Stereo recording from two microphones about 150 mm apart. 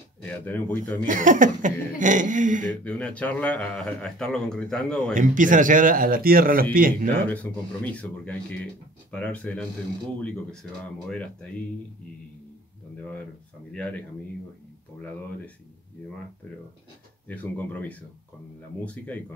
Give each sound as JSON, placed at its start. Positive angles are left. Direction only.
{"t": 0.3, "sound": "speech", "side_deg": 10}
{"t": 1.0, "sound": "speech", "side_deg": -60}
{"t": 2.8, "sound": "speech", "side_deg": 10}
{"t": 5.1, "sound": "speech", "side_deg": -60}
{"t": 7.2, "sound": "speech", "side_deg": 10}
{"t": 13.7, "sound": "speech", "side_deg": 10}
{"t": 17.3, "sound": "speech", "side_deg": 10}
{"t": 19.0, "sound": "speech", "side_deg": 10}